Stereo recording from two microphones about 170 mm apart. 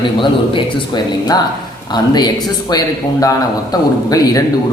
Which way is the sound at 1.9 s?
25° left (ahead or behind).